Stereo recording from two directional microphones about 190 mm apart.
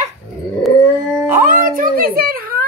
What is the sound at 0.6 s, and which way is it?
Dog, centre (ahead or behind).